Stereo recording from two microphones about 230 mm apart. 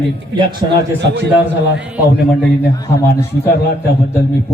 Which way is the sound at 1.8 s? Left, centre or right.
Centre.